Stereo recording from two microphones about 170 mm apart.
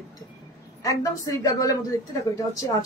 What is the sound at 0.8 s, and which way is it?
A woman's voice, 20° left (ahead or behind).